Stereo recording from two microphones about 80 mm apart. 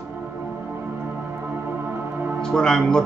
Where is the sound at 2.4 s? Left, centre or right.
Centre.